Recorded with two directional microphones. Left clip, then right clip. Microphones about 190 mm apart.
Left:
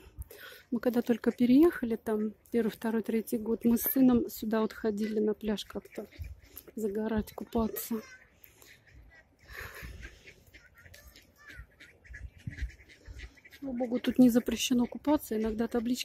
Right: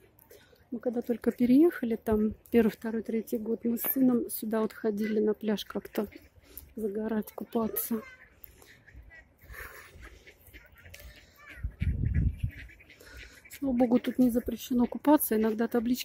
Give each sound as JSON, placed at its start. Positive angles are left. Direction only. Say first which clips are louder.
{"t": 0.7, "sound": "speech", "louder": "left 2 dB", "side_deg": 25}
{"t": 1.0, "sound": "speech", "louder": "even", "side_deg": 10}
{"t": 2.8, "sound": "speech", "louder": "left 1 dB", "side_deg": 15}
{"t": 9.5, "sound": "a sound", "louder": "left 1 dB", "side_deg": 0}
{"t": 13.7, "sound": "speech", "louder": "right 7 dB", "side_deg": -5}
{"t": 14.2, "sound": "speech", "louder": "left 3 dB", "side_deg": 15}
{"t": 14.8, "sound": "speech", "louder": "right 5 dB", "side_deg": -5}